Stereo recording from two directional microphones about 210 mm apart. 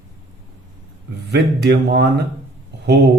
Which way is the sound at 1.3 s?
50° right (ahead or behind).